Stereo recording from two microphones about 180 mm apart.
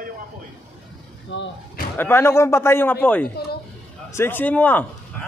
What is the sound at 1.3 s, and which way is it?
Speech, 90° left.